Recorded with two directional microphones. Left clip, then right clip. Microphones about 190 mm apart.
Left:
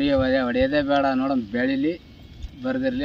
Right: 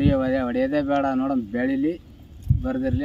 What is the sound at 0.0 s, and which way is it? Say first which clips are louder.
Speech: left 2 dB; centre (ahead or behind).